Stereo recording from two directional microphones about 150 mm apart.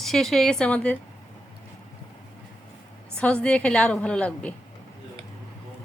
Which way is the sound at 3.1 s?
10° left (ahead or behind).